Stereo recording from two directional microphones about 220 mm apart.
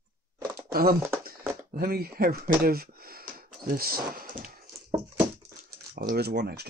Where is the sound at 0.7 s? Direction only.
45° right (ahead or behind).